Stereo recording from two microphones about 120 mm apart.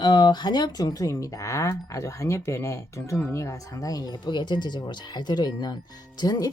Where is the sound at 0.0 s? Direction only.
40° left (ahead or behind).